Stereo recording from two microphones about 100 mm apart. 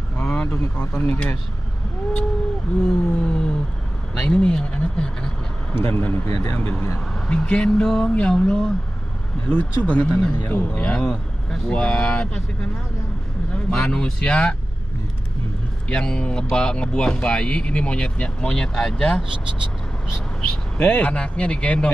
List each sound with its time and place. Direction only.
0.2 s speech: 15° left (ahead or behind)
2.9 s speech: 10° left (ahead or behind)
5.8 s speech: 25° left (ahead or behind)
7.2 s speech: 10° left (ahead or behind)
10.8 s speech: 10° left (ahead or behind)
13.7 s speech: 10° left (ahead or behind)
15.9 s speech: 10° left (ahead or behind)
20.7 s speech: 15° left (ahead or behind)